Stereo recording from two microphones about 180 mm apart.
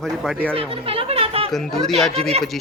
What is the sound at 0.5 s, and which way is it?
Speech, 30° right (ahead or behind).